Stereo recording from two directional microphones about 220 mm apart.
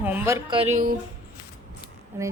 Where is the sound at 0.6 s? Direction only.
35° right (ahead or behind).